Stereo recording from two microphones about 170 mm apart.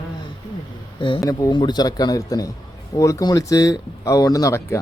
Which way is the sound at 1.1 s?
20° left (ahead or behind).